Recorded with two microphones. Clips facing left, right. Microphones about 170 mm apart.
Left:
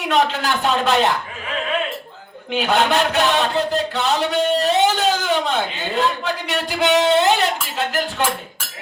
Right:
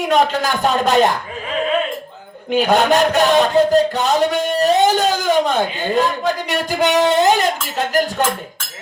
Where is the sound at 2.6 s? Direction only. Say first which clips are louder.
Right 4 dB; 40° right (ahead or behind).